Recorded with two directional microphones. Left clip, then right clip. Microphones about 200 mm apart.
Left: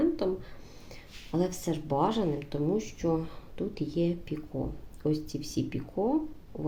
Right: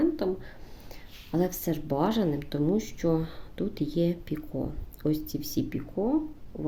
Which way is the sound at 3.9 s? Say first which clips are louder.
Right 1 dB; 20° right (ahead or behind).